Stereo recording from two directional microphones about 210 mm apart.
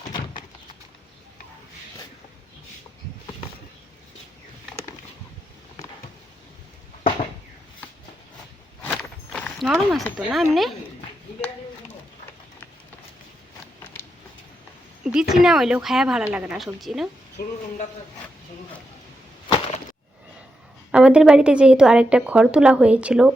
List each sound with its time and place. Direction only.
9.3 s speech: centre (ahead or behind)
15.0 s a woman's voice: 5° right (ahead or behind)
19.5 s a sound: 25° left (ahead or behind)
20.9 s a woman's voice: 5° right (ahead or behind)